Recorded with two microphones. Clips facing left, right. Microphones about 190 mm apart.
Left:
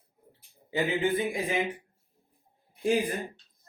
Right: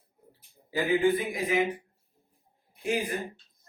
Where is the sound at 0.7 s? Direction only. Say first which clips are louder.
Right 3 dB; 25° left (ahead or behind).